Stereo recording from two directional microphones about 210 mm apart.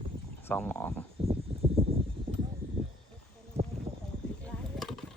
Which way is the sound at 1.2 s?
30° right (ahead or behind).